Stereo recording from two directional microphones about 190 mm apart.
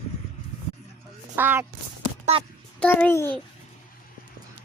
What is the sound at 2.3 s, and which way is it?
Speech, 35° right (ahead or behind).